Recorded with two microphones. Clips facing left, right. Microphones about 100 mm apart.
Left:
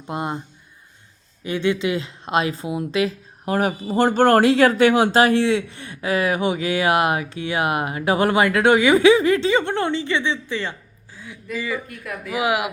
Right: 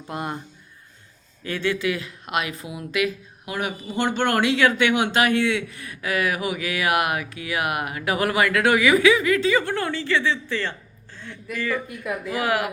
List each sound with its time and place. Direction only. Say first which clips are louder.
0.1 s speech: left 3 dB; 25° left (ahead or behind)
1.5 s speech: left 3 dB; 20° left (ahead or behind)
11.9 s speech: right 3 dB; 20° right (ahead or behind)
12.3 s speech: left 3 dB; 15° left (ahead or behind)